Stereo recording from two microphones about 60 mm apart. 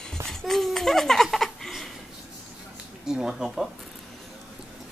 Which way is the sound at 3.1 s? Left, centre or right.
Centre.